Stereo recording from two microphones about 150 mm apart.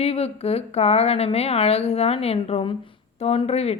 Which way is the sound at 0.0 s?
45° left (ahead or behind).